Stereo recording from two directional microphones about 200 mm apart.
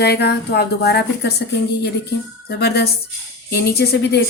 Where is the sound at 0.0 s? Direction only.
55° left (ahead or behind).